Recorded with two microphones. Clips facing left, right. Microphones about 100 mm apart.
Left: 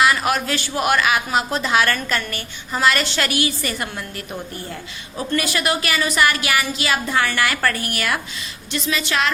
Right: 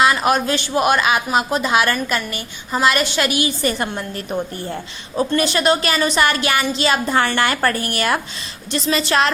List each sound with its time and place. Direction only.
0.0 s a woman's voice: 25° right (ahead or behind)
3.6 s a woman's voice: 30° right (ahead or behind)